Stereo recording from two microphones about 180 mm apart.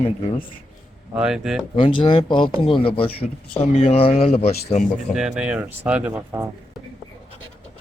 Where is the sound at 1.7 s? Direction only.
30° left (ahead or behind).